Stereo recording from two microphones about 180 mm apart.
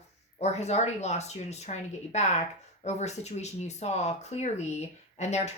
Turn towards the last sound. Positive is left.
turn(degrees=40)  # may be behind; listen again after turning